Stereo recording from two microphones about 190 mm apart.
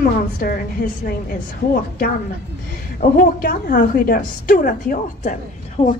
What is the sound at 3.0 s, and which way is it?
A woman's voice, 50° left (ahead or behind).